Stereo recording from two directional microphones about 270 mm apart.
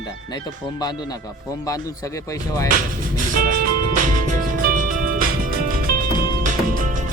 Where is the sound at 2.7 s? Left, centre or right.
Right.